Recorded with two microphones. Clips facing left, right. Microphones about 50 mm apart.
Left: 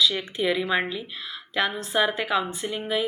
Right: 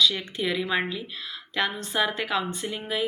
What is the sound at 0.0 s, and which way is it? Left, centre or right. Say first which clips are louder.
Speech: left 1 dB; centre.